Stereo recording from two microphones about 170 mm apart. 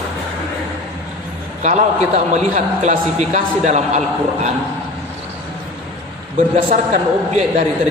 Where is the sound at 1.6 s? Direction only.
45° right (ahead or behind).